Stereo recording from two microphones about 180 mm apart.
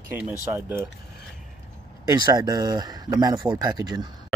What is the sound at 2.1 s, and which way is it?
Speech, 20° right (ahead or behind).